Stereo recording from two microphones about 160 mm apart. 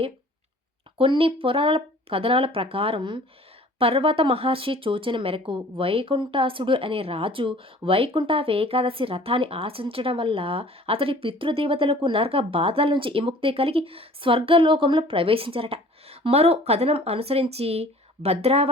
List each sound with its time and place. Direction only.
0.9 s speech: 35° right (ahead or behind)